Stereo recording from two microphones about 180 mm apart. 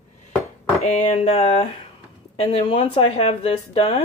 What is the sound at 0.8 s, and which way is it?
Speech, 40° left (ahead or behind).